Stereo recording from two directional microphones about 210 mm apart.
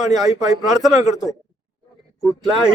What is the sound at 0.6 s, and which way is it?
Speech, centre (ahead or behind).